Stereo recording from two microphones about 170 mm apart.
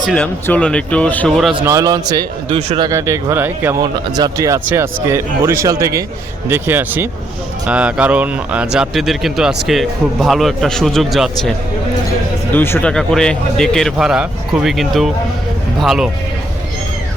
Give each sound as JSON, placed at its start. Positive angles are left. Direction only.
{"t": 0.0, "sound": "speech", "side_deg": 5}
{"t": 1.6, "sound": "speech", "side_deg": -20}
{"t": 2.6, "sound": "speech", "side_deg": -35}
{"t": 2.9, "sound": "speech", "side_deg": -15}
{"t": 12.5, "sound": "speech", "side_deg": 10}